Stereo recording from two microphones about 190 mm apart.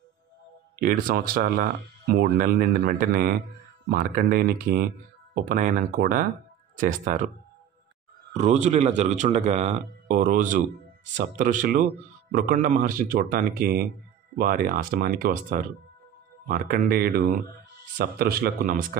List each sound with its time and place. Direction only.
0.7 s speech: 50° right (ahead or behind)
8.3 s speech: 35° right (ahead or behind)